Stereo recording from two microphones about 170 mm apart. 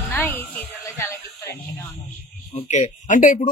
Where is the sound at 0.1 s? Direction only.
10° left (ahead or behind).